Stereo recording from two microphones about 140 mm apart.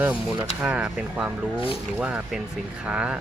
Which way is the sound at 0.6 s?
10° right (ahead or behind).